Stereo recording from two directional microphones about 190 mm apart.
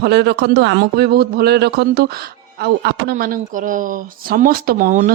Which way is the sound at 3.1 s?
45° right (ahead or behind).